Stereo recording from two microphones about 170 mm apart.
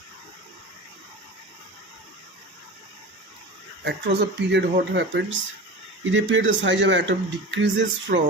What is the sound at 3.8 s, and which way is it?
Speech, 85° right.